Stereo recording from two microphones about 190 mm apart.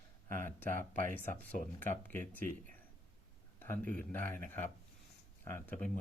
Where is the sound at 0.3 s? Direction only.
45° right (ahead or behind).